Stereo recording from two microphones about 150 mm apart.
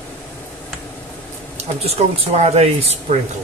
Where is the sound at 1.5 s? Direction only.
45° right (ahead or behind).